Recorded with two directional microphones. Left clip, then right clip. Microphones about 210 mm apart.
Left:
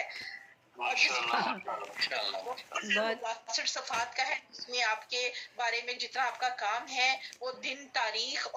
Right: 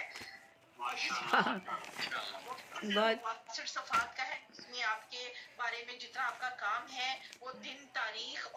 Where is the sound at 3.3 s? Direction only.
40° left (ahead or behind).